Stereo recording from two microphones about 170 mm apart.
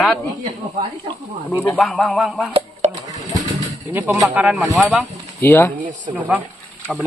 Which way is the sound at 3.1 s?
20° right (ahead or behind).